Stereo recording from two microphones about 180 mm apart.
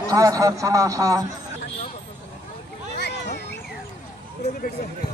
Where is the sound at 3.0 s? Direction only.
70° left (ahead or behind).